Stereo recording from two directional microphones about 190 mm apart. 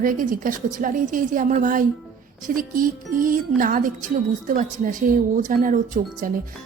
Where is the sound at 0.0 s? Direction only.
45° right (ahead or behind).